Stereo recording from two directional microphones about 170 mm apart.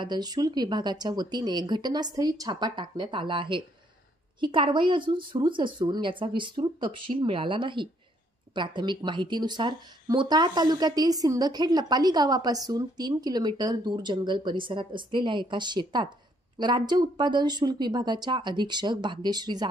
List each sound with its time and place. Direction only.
0.0 s speech: 25° right (ahead or behind)